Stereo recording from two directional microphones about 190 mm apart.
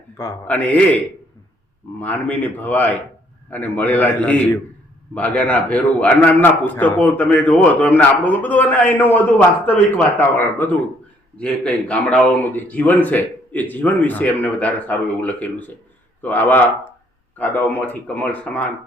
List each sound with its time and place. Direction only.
0.2 s a man's voice: 10° left (ahead or behind)